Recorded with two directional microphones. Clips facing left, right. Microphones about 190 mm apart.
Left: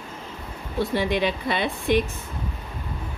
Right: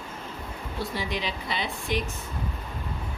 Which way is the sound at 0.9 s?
60° left (ahead or behind).